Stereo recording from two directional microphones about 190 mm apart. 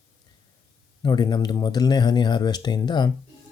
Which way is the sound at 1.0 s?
20° left (ahead or behind).